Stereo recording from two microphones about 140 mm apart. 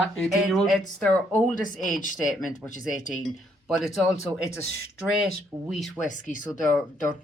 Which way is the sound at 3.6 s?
Centre (ahead or behind).